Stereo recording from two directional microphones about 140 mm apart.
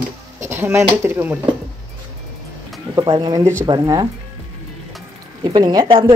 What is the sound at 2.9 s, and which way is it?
Speech, 30° right (ahead or behind).